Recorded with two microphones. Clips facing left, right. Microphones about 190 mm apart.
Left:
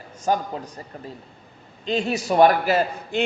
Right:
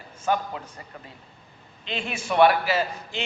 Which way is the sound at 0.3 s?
40° left (ahead or behind).